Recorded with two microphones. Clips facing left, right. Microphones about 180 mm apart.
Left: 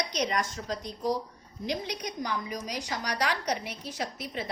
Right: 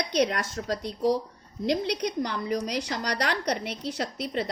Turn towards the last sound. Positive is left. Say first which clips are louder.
# right 4 dB
turn(degrees=-65)  # may be behind; listen again after turning